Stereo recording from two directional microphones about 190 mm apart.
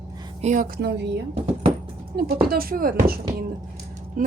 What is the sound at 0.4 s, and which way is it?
Speech, 45° right (ahead or behind).